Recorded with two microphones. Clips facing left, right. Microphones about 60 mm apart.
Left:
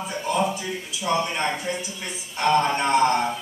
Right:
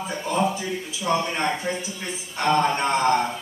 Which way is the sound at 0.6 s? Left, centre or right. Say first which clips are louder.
Right 1 dB; right.